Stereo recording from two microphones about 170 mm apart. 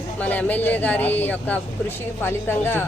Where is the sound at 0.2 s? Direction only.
10° left (ahead or behind).